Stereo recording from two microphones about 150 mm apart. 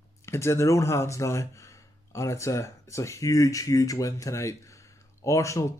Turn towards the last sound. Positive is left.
turn(degrees=20)  # may be behind; listen again after turning